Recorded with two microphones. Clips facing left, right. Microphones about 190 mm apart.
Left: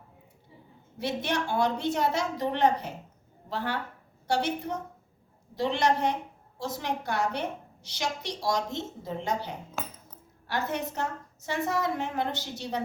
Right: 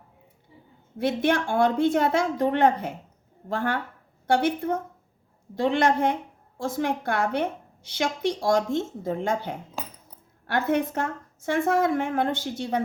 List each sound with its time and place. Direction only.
0.9 s a woman's voice: 50° right (ahead or behind)